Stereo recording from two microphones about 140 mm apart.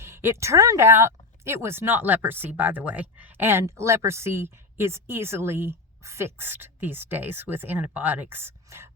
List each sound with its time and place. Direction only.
0.0 s speech: 20° right (ahead or behind)